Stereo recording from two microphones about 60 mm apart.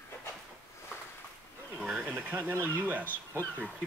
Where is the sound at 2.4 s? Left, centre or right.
Right.